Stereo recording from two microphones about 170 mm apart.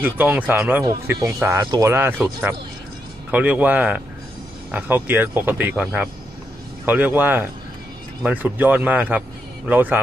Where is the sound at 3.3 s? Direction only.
10° right (ahead or behind).